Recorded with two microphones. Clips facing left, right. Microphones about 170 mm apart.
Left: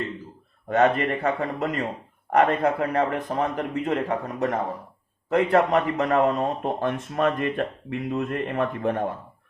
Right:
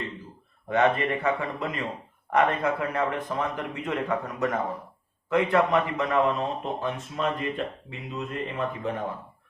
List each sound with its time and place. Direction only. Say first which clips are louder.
0.7 s speech: left 3 dB; 40° left (ahead or behind)